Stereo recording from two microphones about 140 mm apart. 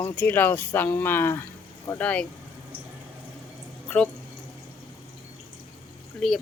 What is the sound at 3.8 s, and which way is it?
Drip, 10° left (ahead or behind).